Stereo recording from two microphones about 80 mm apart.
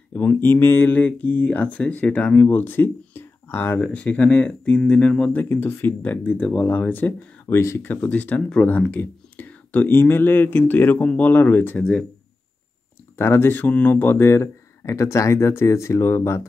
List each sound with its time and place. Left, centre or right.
0.1 s speech: left
5.4 s speech: left
6.2 s speech: centre; by 7.9 s left
7.9 s speech: centre
13.2 s speech: left